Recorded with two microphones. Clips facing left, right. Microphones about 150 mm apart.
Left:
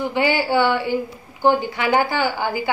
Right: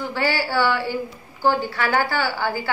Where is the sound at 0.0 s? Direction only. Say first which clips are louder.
Left 4 dB; 15° left (ahead or behind).